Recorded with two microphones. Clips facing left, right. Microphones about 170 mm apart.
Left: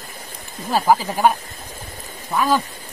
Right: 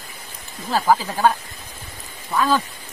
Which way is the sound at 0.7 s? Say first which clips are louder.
Left 1 dB; 15° left (ahead or behind).